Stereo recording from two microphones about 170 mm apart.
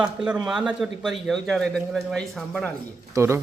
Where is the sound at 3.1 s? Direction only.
15° right (ahead or behind).